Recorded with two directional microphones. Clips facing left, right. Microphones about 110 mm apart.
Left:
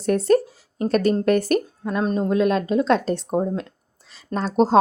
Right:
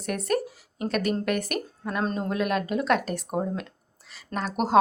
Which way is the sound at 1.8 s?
25° left (ahead or behind).